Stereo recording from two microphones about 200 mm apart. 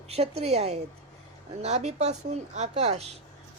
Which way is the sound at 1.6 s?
35° right (ahead or behind).